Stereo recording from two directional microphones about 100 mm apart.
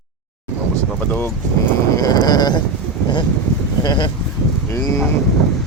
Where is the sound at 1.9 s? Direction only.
40° left (ahead or behind).